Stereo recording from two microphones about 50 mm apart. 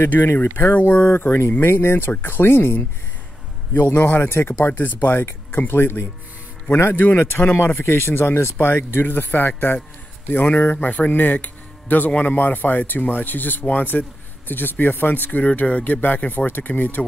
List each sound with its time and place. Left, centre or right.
0.6 s speech: left
4.6 s speech: left
5.7 s speech: left